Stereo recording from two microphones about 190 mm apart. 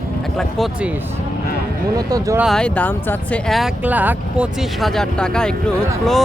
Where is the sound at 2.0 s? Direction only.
20° right (ahead or behind).